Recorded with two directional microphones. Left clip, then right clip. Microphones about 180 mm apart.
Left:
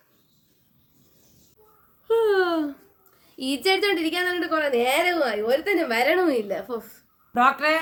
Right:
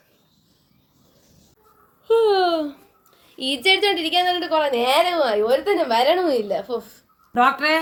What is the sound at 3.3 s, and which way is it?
A woman's voice, 15° left (ahead or behind).